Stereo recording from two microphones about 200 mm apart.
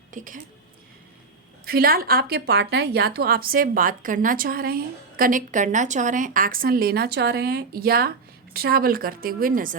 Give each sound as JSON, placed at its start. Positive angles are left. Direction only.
{"t": 0.1, "sound": "speech", "side_deg": -40}
{"t": 1.6, "sound": "a woman's voice", "side_deg": -50}